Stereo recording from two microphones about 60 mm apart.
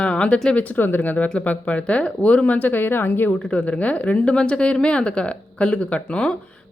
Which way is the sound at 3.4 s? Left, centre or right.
Centre.